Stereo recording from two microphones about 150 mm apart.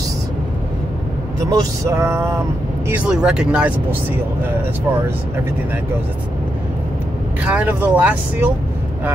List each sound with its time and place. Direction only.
1.5 s vehicle: 20° right (ahead or behind)
2.9 s speech: 5° right (ahead or behind)
7.4 s speech: 10° right (ahead or behind)